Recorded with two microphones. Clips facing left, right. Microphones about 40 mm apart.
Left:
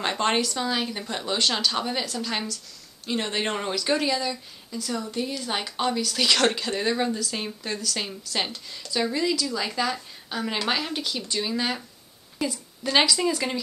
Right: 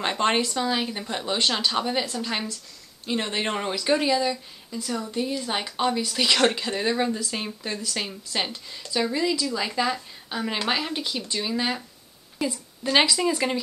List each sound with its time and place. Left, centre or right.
0.0 s a woman's voice: centre
12.8 s a woman's voice: centre